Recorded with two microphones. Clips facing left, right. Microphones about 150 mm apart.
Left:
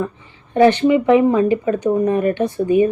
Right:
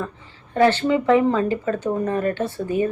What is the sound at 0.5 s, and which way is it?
A woman's voice, 20° left (ahead or behind).